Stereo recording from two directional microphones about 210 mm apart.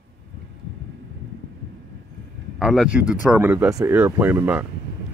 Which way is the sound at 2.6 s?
Centre (ahead or behind).